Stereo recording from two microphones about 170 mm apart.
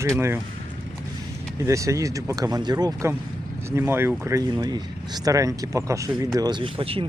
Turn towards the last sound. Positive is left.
turn(degrees=-30)  # may be behind; listen again after turning